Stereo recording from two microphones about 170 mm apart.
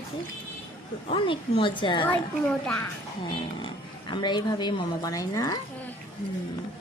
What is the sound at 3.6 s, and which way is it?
Speech, 25° left (ahead or behind).